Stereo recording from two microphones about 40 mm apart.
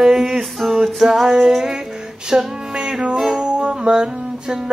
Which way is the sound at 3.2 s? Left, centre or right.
Centre.